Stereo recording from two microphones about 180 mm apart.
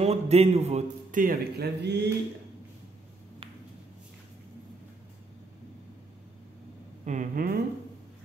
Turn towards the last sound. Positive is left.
turn(degrees=-50)  # may be behind; listen again after turning